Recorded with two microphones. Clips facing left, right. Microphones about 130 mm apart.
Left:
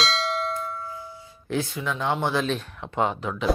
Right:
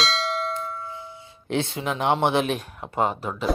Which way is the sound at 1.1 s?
25° right (ahead or behind).